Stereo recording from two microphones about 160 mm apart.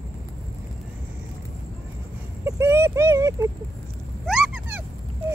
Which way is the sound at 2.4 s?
15° right (ahead or behind).